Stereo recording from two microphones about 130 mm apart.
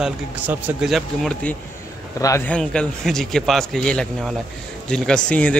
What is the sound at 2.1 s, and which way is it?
Speech, 25° left (ahead or behind).